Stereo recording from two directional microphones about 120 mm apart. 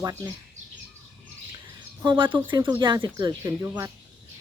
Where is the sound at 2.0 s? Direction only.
40° right (ahead or behind).